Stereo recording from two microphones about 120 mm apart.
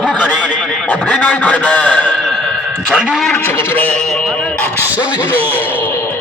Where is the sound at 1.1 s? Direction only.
10° left (ahead or behind).